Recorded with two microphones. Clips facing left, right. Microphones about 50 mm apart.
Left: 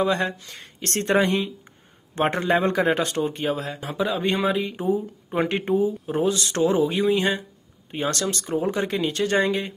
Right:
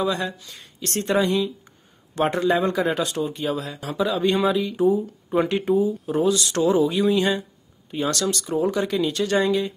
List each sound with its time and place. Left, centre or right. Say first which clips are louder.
0.0 s a man's voice: left 2 dB; left